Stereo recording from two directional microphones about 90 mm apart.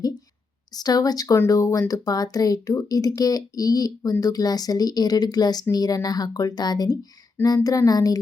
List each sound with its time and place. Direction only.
0.8 s speech: 45° left (ahead or behind)